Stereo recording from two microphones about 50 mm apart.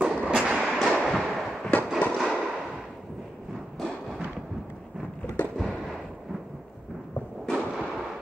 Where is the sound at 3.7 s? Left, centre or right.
Centre.